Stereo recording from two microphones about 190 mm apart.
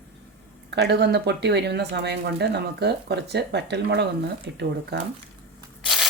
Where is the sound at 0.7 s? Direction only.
60° right (ahead or behind).